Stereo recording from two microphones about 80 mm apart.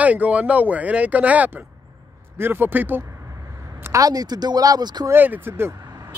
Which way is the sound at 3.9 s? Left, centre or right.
Right.